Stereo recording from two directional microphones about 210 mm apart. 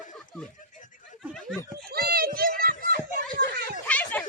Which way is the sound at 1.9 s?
45° right (ahead or behind).